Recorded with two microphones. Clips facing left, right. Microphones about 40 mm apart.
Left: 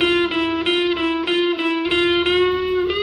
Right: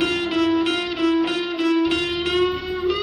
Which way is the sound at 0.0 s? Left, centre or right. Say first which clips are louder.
Left 2 dB; left.